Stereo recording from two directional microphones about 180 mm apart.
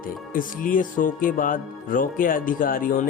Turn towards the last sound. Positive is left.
turn(degrees=50)  # may be behind; listen again after turning